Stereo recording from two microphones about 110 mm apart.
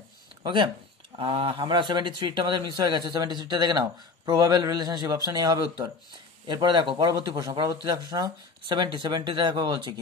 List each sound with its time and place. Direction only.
0.4 s a man's voice: 45° right (ahead or behind)